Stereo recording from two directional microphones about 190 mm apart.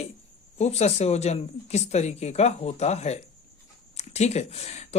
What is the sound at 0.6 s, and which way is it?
Speech, 35° left (ahead or behind).